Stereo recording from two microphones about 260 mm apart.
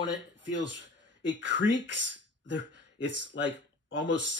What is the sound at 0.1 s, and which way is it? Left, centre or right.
Speech, right.